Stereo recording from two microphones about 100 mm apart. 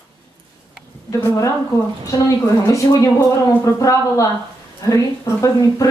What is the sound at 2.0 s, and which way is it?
A woman's voice, 30° left (ahead or behind).